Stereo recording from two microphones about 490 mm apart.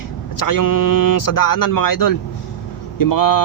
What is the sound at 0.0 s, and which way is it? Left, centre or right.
Speech, left.